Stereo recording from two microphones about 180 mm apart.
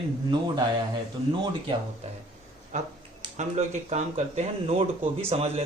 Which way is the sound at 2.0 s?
35° right (ahead or behind).